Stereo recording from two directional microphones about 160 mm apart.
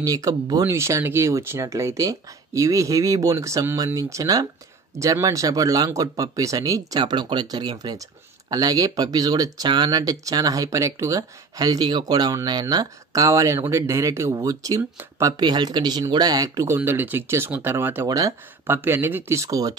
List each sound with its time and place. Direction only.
0.0 s speech: 20° right (ahead or behind)